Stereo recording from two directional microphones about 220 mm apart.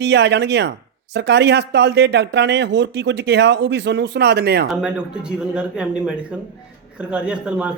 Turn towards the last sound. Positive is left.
turn(degrees=-5)  # may be behind; listen again after turning